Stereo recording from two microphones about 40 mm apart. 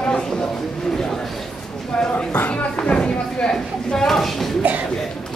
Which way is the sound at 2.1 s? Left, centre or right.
Left.